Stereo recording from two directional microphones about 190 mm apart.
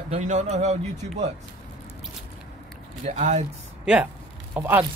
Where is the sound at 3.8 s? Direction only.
5° right (ahead or behind).